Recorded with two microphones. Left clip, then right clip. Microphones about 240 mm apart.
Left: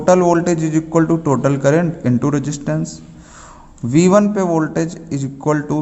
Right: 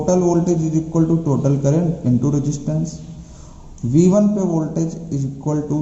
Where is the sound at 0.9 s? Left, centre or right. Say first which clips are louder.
Left 5 dB; left.